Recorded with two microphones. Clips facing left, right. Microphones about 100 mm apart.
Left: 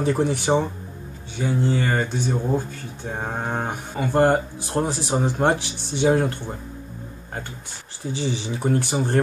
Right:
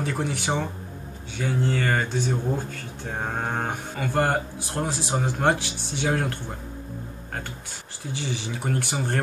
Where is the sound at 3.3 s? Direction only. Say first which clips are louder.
Left 1 dB; 10° left (ahead or behind).